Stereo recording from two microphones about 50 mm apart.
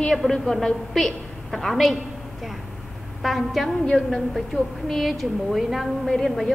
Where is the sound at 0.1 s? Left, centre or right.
Centre.